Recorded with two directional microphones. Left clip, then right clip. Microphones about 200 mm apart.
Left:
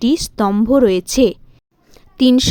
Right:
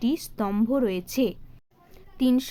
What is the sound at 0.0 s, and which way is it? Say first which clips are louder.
A woman's voice: left 11 dB; 40° left (ahead or behind).